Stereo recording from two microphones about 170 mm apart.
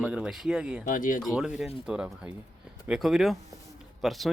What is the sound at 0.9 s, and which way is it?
Speech, 50° left (ahead or behind).